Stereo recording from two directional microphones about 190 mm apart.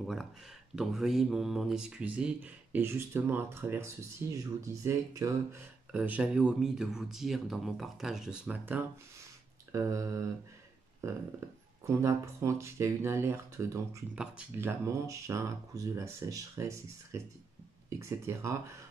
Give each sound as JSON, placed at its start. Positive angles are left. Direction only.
{"t": 0.0, "sound": "speech", "side_deg": 0}
{"t": 11.8, "sound": "speech", "side_deg": -15}